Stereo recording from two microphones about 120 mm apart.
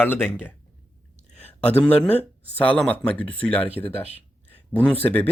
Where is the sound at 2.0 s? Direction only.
15° left (ahead or behind).